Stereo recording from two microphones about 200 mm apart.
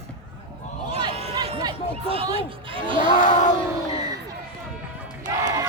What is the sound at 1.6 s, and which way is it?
Speech, 25° right (ahead or behind).